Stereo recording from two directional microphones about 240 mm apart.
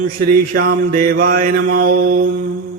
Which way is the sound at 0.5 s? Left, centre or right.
Right.